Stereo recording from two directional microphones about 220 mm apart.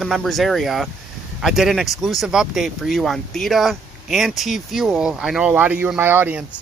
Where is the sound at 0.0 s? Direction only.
Centre (ahead or behind).